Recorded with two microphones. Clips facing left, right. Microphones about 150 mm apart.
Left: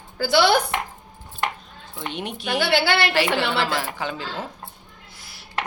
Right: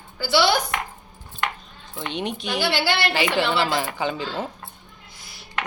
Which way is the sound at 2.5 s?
55° left (ahead or behind).